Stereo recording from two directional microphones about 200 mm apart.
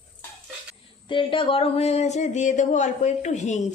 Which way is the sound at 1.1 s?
25° left (ahead or behind).